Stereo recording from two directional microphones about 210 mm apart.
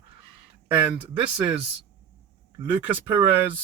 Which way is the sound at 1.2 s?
25° right (ahead or behind).